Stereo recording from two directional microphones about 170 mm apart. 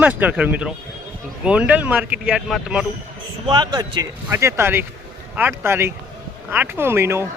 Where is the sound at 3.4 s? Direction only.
25° right (ahead or behind).